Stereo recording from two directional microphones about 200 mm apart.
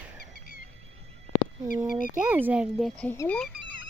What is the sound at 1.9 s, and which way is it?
Speech, 40° left (ahead or behind).